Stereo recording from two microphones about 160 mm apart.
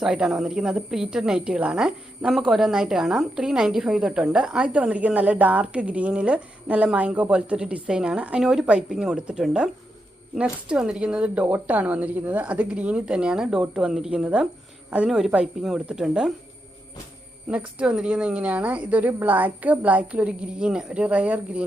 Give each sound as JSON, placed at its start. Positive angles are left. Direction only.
{"t": 0.0, "sound": "speech", "side_deg": -5}
{"t": 17.5, "sound": "speech", "side_deg": -5}